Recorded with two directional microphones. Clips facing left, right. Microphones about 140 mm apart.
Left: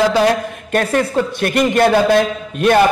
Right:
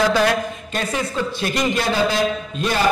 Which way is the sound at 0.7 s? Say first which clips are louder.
Left 10 dB; 60° left (ahead or behind).